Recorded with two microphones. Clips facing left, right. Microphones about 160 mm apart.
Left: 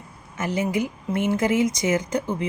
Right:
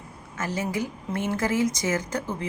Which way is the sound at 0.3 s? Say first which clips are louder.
Left 4 dB; 20° left (ahead or behind).